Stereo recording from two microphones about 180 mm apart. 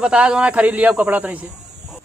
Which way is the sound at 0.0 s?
5° right (ahead or behind).